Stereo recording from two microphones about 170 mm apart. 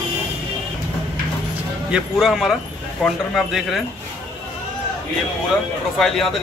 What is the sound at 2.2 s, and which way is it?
Speech, centre (ahead or behind).